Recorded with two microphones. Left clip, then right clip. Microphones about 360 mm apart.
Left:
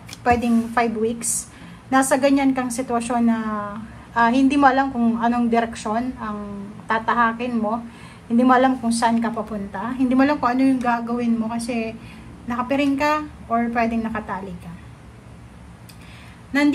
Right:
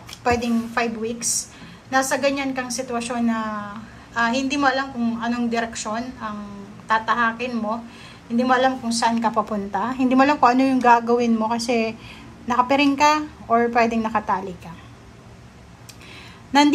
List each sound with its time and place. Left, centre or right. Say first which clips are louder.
0.1 s a woman's voice: left 2 dB; centre